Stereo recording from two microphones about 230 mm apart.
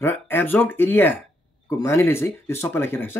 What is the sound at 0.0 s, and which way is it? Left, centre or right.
Speech, centre.